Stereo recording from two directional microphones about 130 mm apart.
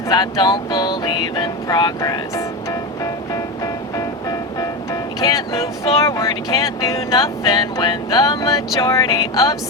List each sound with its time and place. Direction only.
0.1 s music: 30° left (ahead or behind)
5.2 s speech: 25° left (ahead or behind)